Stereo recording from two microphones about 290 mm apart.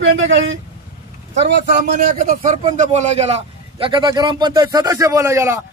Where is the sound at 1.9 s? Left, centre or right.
Right; by 5.6 s centre.